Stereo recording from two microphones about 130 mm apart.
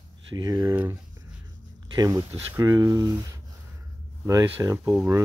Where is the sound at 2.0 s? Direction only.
25° right (ahead or behind).